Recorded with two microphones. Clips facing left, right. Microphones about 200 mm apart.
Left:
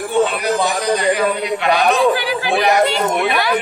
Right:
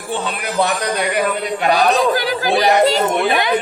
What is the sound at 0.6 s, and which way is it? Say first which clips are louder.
Speech: right 4 dB; 65° right (ahead or behind).